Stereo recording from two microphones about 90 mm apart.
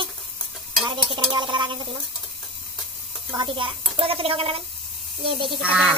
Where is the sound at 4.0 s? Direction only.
90° right.